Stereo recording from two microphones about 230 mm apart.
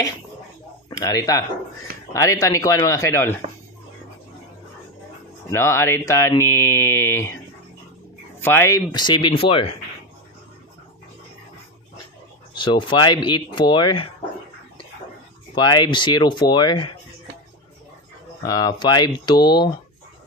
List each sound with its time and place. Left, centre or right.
0.8 s speech: centre
5.5 s speech: centre
8.4 s speech: centre
12.6 s speech: centre
15.5 s speech: centre
18.4 s speech: centre